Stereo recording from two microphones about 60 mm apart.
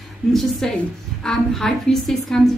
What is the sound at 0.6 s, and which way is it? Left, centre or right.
A woman's voice, centre.